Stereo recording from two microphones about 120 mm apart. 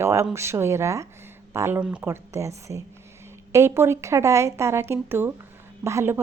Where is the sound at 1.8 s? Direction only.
10° right (ahead or behind).